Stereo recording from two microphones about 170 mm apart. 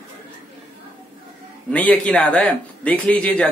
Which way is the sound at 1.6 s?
10° left (ahead or behind).